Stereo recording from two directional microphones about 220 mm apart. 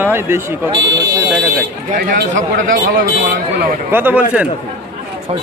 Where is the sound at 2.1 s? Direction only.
40° right (ahead or behind).